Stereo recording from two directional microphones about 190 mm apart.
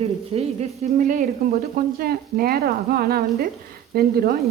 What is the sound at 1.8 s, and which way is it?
Frying, 50° right (ahead or behind).